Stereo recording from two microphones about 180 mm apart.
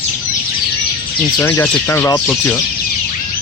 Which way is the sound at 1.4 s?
15° left (ahead or behind).